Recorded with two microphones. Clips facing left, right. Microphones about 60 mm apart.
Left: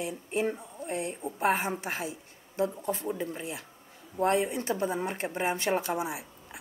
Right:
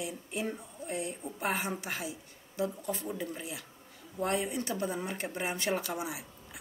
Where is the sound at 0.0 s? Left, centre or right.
Left.